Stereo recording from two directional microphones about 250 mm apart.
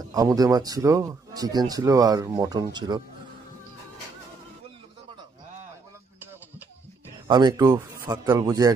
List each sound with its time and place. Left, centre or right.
0.0 s speech: centre
7.2 s speech: centre